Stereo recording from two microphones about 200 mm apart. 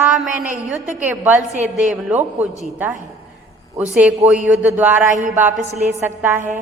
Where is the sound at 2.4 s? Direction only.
10° right (ahead or behind).